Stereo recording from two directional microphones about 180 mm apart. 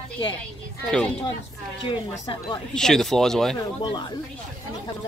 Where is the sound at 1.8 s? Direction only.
25° left (ahead or behind).